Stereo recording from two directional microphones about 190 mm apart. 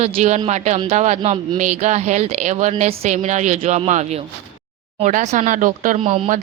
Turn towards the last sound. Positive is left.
turn(degrees=-30)  # may be behind; listen again after turning